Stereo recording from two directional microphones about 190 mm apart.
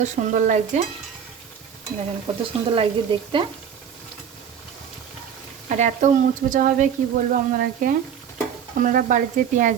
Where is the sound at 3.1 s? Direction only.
25° right (ahead or behind).